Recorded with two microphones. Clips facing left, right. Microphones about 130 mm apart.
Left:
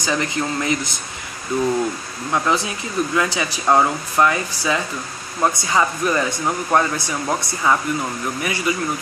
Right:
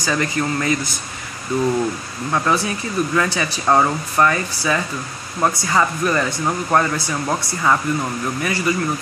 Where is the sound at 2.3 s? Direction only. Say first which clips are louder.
Right 1 dB; 15° left (ahead or behind).